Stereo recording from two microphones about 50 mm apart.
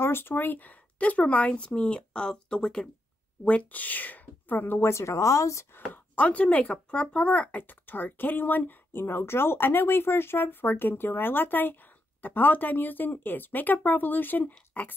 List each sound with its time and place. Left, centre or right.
0.0 s speech: left; by 2.9 s centre
3.4 s speech: left
4.9 s speech: left
6.1 s speech: left
9.0 s speech: left